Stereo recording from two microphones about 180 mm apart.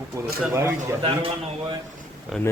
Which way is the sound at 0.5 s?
15° right (ahead or behind).